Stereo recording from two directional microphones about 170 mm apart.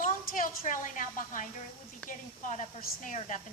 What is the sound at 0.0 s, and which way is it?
A woman's voice, 50° left (ahead or behind).